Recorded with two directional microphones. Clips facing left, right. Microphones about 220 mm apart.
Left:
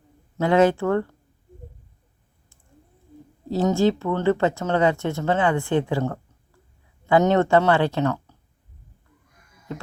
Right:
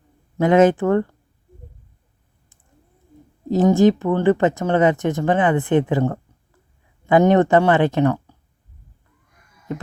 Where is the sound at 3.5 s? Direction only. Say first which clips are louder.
Right 5 dB; 20° right (ahead or behind).